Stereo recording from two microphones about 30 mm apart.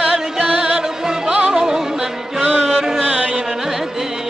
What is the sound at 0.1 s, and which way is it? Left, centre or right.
Music, right.